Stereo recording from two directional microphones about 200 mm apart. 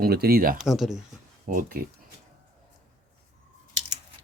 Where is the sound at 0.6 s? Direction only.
Centre (ahead or behind).